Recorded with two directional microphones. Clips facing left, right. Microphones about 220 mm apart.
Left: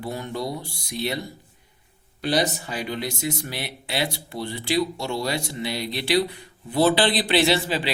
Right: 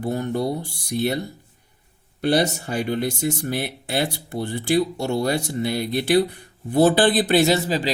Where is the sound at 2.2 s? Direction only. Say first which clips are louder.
Right 4 dB; 50° right (ahead or behind).